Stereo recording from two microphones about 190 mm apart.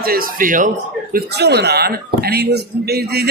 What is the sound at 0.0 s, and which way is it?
Speech, 50° right (ahead or behind).